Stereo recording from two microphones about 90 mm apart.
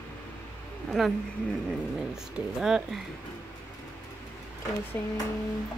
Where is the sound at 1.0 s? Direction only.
5° right (ahead or behind).